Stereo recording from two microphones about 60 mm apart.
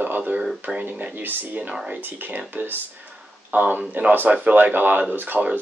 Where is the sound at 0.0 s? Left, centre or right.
Right.